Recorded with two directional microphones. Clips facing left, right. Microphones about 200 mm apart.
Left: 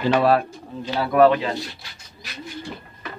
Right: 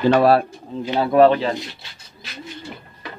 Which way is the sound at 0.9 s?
25° right (ahead or behind).